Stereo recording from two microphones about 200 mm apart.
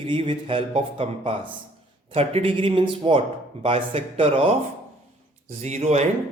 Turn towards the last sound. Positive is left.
turn(degrees=-35)  # may be behind; listen again after turning